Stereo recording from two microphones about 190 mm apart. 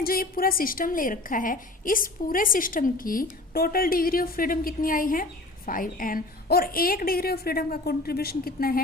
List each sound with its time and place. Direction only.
0.0 s a woman's voice: 50° left (ahead or behind)